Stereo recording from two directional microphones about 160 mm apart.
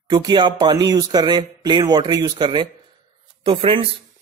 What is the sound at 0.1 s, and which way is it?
Speech, 30° right (ahead or behind).